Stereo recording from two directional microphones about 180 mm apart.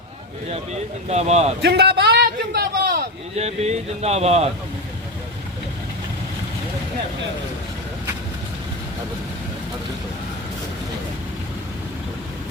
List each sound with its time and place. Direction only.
0.5 s speech: 35° right (ahead or behind)
1.6 s a sound: 65° right (ahead or behind)
3.3 s speech: 35° right (ahead or behind)